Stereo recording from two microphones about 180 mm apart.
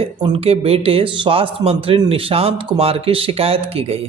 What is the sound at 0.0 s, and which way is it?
A man's voice, 30° right (ahead or behind).